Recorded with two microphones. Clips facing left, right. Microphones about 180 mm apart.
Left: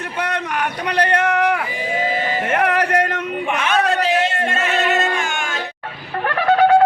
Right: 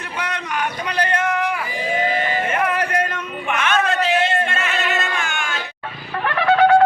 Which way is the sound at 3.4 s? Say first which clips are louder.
Left 1 dB; 35° left (ahead or behind).